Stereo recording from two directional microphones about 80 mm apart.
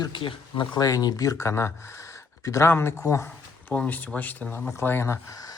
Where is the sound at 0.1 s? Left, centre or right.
Left.